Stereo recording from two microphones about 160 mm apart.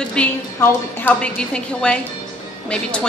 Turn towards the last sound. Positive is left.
turn(degrees=5)  # may be behind; listen again after turning